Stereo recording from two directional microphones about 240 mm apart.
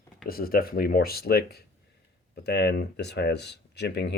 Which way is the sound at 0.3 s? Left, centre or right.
Left.